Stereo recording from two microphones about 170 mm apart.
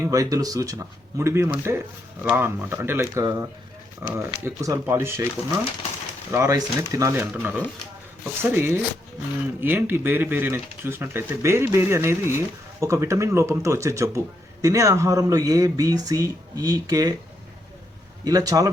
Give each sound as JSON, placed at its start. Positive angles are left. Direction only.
{"t": 0.0, "sound": "speech", "side_deg": -20}
{"t": 18.3, "sound": "speech", "side_deg": -20}